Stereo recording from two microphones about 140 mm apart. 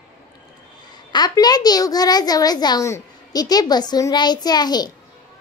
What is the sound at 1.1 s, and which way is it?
A child's voice, 30° left (ahead or behind).